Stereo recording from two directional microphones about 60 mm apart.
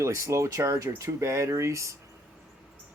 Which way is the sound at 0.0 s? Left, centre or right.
Right.